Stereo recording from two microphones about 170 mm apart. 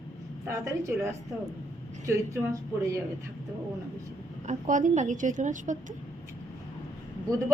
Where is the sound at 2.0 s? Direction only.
15° right (ahead or behind).